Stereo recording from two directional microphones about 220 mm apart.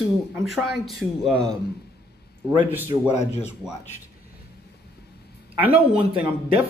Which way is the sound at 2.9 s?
20° right (ahead or behind).